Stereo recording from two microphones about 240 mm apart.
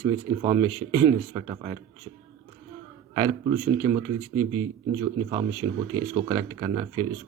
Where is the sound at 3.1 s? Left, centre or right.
Centre.